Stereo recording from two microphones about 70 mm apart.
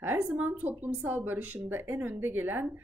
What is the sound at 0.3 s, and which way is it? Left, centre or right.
Speech, centre.